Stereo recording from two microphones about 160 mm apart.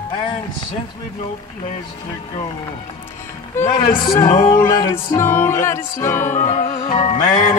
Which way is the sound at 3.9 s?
30° left (ahead or behind).